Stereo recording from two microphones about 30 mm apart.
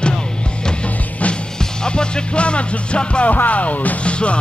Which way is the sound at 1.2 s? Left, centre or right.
Left.